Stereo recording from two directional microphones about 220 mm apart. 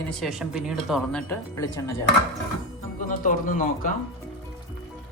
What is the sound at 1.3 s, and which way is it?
Speech, 15° left (ahead or behind).